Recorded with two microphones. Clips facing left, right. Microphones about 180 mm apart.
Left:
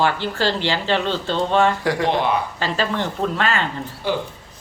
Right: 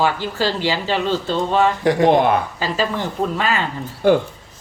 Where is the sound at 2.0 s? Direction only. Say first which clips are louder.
Right 6 dB; 50° right (ahead or behind).